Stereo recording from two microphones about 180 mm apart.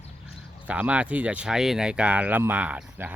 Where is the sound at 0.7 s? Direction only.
5° right (ahead or behind).